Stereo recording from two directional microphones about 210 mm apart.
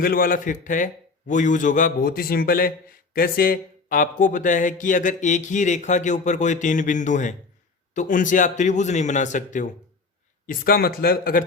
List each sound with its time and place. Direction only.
0.0 s a man's voice: 45° left (ahead or behind)